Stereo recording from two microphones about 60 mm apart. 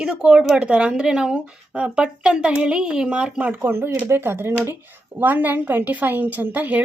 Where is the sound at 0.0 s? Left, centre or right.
Centre.